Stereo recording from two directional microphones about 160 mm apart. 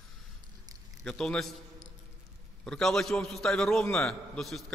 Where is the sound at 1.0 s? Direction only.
5° left (ahead or behind).